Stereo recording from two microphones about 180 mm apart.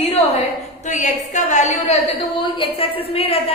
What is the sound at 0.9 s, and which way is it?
A woman's voice, 40° left (ahead or behind).